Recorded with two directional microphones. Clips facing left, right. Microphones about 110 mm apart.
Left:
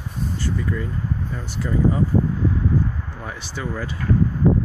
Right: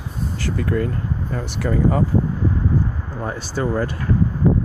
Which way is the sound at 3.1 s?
35° right (ahead or behind).